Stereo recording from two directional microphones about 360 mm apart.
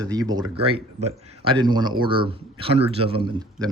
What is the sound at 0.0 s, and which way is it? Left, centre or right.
A man's voice, centre.